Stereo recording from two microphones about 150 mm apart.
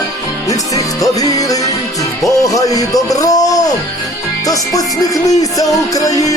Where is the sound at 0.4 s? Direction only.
20° left (ahead or behind).